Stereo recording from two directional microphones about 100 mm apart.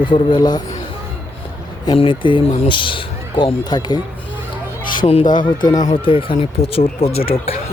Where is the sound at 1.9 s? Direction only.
60° left (ahead or behind).